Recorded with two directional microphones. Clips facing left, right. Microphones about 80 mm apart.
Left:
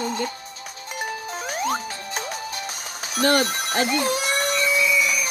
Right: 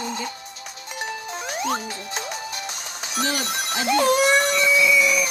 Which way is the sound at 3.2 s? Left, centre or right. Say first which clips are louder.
Left 8 dB; left.